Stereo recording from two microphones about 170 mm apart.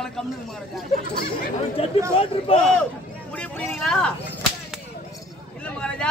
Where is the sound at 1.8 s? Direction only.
35° left (ahead or behind).